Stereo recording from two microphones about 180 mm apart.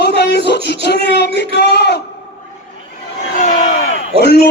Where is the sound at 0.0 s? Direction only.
65° left (ahead or behind).